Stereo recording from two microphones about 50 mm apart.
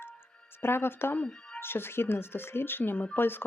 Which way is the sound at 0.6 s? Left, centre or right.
Left.